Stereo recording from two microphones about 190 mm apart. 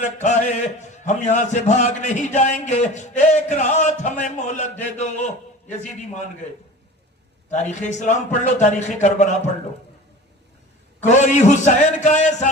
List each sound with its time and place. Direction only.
0.0 s a man's voice: 40° left (ahead or behind)
7.5 s a man's voice: 40° left (ahead or behind)
11.0 s a man's voice: 40° left (ahead or behind)